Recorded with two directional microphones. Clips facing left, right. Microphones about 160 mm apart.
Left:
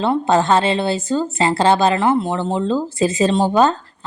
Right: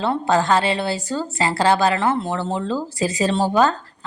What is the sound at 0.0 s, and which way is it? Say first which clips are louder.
A woman's voice: left 3 dB; 20° left (ahead or behind).